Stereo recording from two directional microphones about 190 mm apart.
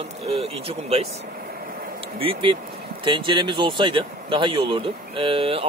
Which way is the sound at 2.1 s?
25° right (ahead or behind).